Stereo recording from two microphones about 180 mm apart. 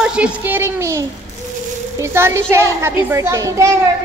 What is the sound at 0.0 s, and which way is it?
A woman's voice, 5° right (ahead or behind).